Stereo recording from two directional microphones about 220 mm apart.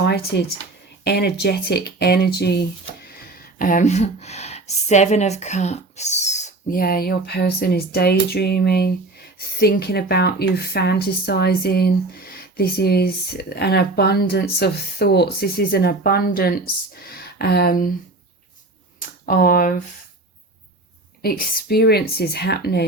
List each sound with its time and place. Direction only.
0.0 s speech: 50° left (ahead or behind)
18.9 s a sound: 40° left (ahead or behind)
21.2 s speech: 40° left (ahead or behind)